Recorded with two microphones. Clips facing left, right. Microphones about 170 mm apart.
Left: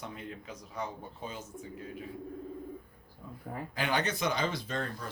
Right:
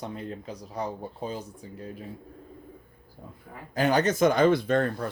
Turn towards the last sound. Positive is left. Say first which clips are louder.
# right 11 dB
turn(degrees=-60)  # may be behind; listen again after turning